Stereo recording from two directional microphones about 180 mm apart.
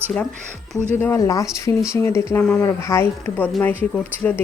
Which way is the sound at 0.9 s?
15° left (ahead or behind).